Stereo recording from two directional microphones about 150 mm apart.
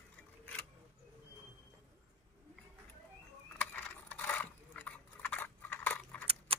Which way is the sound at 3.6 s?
10° left (ahead or behind).